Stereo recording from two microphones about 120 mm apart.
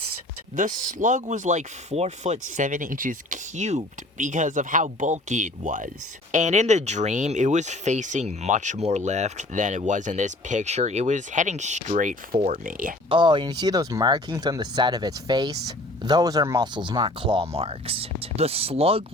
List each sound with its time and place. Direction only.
0.5 s speech: 90° right
13.1 s speech: 40° right (ahead or behind)